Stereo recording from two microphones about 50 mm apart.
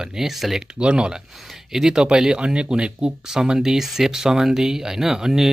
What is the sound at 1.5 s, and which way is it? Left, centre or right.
Speech, centre.